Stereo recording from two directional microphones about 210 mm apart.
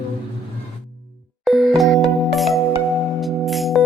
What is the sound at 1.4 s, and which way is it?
Music, centre (ahead or behind).